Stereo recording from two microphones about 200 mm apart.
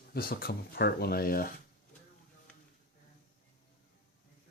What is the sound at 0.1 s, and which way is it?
Speech, 45° left (ahead or behind).